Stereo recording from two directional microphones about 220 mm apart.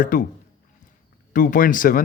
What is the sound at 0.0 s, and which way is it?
Speech, 35° left (ahead or behind).